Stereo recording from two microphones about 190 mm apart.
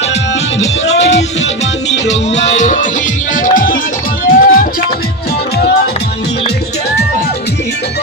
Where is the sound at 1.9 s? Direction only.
35° left (ahead or behind).